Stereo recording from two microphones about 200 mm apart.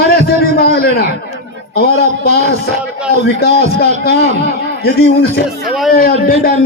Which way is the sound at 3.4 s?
55° left (ahead or behind).